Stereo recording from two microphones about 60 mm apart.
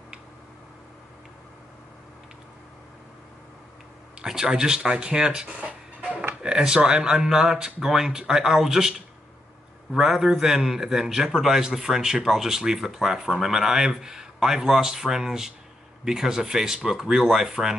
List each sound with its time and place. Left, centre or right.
4.2 s a man's voice: centre
5.5 s music: right
6.4 s a man's voice: centre